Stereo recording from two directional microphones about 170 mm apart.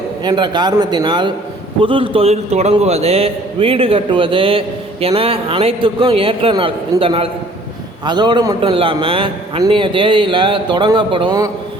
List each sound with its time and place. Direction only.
0.3 s a man's voice: 25° right (ahead or behind)